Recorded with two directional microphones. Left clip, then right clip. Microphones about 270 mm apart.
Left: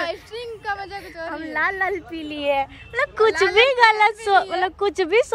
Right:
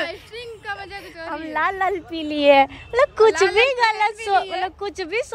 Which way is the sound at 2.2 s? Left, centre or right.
Right.